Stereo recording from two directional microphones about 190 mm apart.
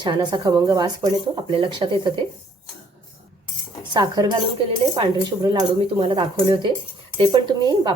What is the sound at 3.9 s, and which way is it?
Speech, 20° right (ahead or behind).